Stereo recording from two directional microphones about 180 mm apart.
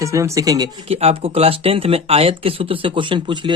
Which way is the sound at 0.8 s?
35° right (ahead or behind).